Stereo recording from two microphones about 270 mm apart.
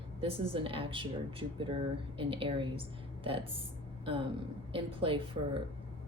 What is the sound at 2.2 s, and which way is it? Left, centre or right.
A woman's voice, centre.